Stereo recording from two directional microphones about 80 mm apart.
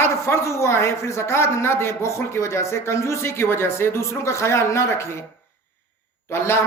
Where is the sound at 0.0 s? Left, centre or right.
Left.